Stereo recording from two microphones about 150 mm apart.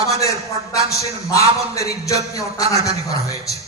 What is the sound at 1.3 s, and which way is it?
A man's voice, 20° left (ahead or behind).